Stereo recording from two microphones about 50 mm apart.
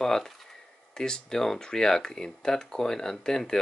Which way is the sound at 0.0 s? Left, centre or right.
Centre.